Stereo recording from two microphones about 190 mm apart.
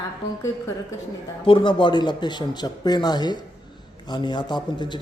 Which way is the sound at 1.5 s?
25° left (ahead or behind).